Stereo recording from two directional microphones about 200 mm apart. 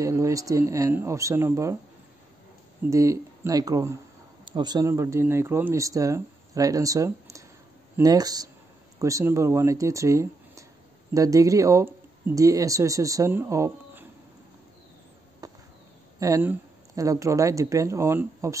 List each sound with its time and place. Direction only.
0.0 s speech: 15° right (ahead or behind)
2.9 s speech: 15° right (ahead or behind)
15.4 s chop: 20° right (ahead or behind)
16.2 s speech: 15° right (ahead or behind)